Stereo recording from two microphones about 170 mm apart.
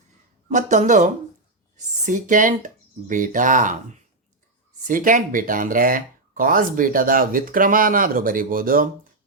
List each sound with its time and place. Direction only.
0.5 s speech: 45° right (ahead or behind)
4.9 s speech: 50° right (ahead or behind)